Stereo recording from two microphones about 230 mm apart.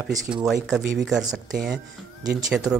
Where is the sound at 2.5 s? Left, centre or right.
Centre.